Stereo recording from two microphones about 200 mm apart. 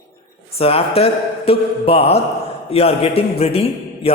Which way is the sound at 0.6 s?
30° left (ahead or behind).